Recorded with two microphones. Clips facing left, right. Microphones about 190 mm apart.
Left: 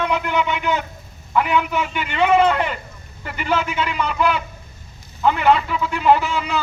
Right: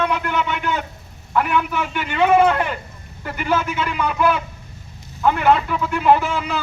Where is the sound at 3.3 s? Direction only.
50° right (ahead or behind).